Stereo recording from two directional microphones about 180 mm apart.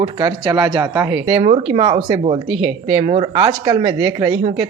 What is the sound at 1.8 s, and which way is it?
Speech, 25° right (ahead or behind).